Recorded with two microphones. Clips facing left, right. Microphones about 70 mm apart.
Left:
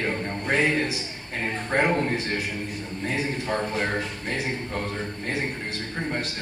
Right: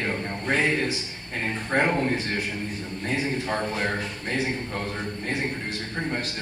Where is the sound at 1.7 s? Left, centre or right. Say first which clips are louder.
Even; centre.